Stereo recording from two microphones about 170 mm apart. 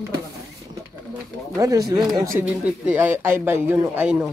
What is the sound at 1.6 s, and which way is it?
Speech, 20° right (ahead or behind).